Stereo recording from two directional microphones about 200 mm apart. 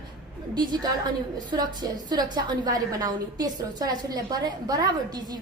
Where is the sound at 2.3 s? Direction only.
20° right (ahead or behind).